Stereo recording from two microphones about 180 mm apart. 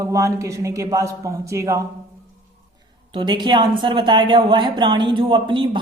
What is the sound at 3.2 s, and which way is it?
A woman's voice, 25° right (ahead or behind).